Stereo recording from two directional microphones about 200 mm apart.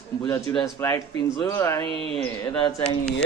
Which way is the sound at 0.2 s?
15° left (ahead or behind).